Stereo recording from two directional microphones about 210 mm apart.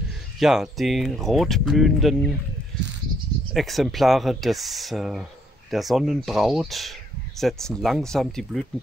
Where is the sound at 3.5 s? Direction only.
Centre (ahead or behind).